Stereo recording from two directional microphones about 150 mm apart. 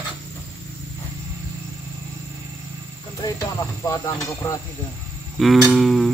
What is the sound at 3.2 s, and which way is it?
Speech, 25° left (ahead or behind).